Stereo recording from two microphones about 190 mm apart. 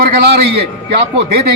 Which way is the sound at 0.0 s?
60° right (ahead or behind).